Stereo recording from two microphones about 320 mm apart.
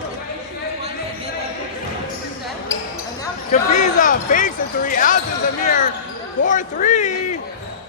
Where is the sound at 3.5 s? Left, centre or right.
Left.